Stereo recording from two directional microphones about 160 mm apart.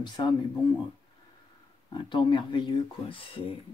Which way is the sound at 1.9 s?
30° left (ahead or behind).